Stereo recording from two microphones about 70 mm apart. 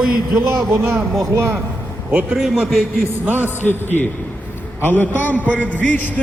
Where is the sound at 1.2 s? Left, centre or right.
Right.